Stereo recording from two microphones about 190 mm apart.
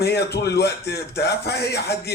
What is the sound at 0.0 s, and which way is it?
A man's voice, 60° left (ahead or behind).